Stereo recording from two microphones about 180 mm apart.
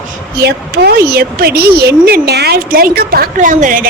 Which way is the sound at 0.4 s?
60° right (ahead or behind).